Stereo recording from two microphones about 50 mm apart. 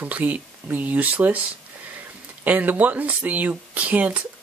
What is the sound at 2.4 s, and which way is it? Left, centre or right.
Speech, right.